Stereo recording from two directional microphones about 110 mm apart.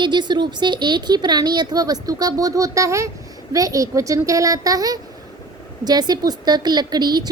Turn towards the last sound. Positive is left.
turn(degrees=-40)  # may be behind; listen again after turning